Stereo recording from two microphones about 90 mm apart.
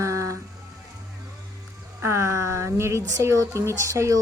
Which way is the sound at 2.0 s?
30° right (ahead or behind).